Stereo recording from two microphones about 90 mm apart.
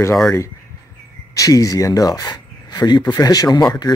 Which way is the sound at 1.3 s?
40° left (ahead or behind).